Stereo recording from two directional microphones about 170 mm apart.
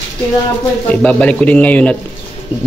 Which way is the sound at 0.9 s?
5° left (ahead or behind).